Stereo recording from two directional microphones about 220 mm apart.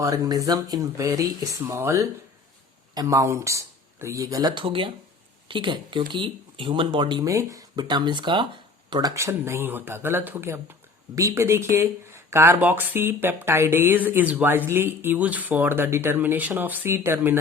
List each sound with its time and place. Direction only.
0.0 s speech: 15° right (ahead or behind)